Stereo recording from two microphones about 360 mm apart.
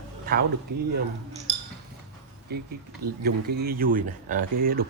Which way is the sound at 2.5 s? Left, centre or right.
Right.